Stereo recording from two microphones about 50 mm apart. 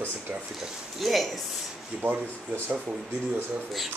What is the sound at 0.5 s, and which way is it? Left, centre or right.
Speech, centre.